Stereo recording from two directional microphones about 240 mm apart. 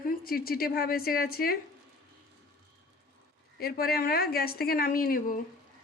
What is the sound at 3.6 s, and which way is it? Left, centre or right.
A woman's voice, left.